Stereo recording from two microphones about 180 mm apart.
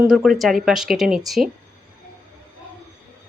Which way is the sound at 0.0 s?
5° right (ahead or behind).